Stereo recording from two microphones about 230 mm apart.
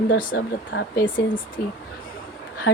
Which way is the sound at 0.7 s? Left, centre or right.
Left.